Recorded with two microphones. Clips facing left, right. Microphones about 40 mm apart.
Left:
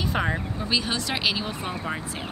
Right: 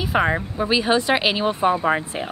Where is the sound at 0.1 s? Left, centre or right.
Right.